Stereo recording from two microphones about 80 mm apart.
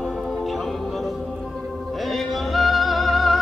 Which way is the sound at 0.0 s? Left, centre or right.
Centre.